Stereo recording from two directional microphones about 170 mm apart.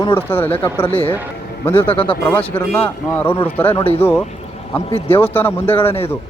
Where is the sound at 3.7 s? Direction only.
35° left (ahead or behind).